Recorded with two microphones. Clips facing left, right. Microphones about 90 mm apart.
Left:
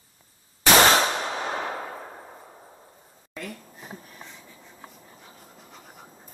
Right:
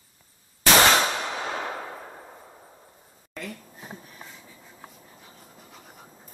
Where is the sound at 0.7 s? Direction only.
20° left (ahead or behind); by 6.3 s 5° left (ahead or behind).